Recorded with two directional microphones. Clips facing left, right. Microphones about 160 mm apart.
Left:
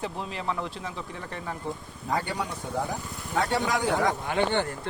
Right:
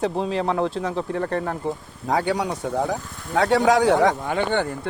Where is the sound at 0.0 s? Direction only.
85° right; by 1.5 s 60° right (ahead or behind).